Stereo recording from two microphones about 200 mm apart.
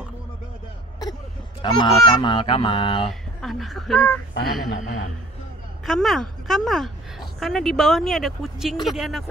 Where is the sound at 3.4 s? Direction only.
Centre (ahead or behind).